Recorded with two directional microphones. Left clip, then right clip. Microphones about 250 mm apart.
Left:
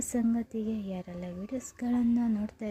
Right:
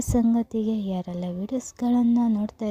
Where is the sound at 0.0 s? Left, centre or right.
Right.